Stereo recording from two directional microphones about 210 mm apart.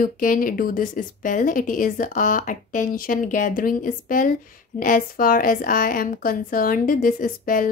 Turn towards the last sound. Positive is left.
turn(degrees=40)  # may be behind; listen again after turning